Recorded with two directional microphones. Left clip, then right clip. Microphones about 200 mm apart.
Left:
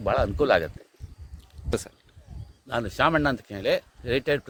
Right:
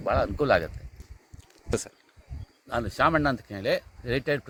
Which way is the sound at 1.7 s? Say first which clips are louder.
Left 1 dB; centre (ahead or behind).